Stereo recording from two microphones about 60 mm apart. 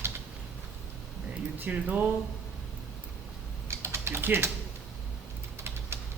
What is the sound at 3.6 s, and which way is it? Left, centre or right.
Typing, right.